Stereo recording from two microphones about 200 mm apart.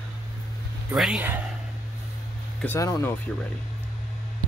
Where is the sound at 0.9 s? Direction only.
5° right (ahead or behind).